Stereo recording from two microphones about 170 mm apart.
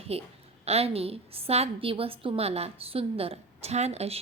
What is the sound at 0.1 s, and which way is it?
A woman's voice, 35° right (ahead or behind).